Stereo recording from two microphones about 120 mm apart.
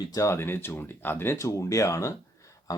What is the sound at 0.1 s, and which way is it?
Speech, 25° left (ahead or behind).